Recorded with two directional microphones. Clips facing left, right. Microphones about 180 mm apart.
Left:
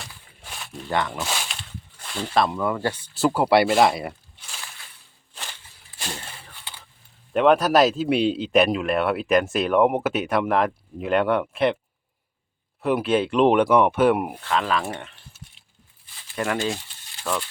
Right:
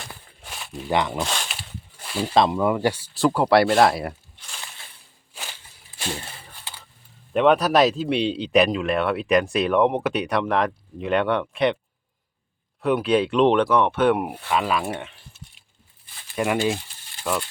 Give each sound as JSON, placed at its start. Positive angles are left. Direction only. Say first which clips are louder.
{"t": 0.4, "sound": "a sound", "louder": "right 2 dB", "side_deg": 0}
{"t": 0.9, "sound": "speech", "louder": "right 3 dB", "side_deg": -20}
{"t": 1.3, "sound": "a sound", "louder": "even", "side_deg": 5}
{"t": 1.5, "sound": "a sound", "louder": "right 1 dB", "side_deg": -5}
{"t": 2.3, "sound": "speech", "louder": "right 3 dB", "side_deg": -20}
{"t": 3.2, "sound": "speech", "louder": "even", "side_deg": 5}
{"t": 7.3, "sound": "speech", "louder": "even", "side_deg": 0}
{"t": 12.8, "sound": "speech", "louder": "right 1 dB", "side_deg": 0}
{"t": 16.3, "sound": "speech", "louder": "right 3 dB", "side_deg": -10}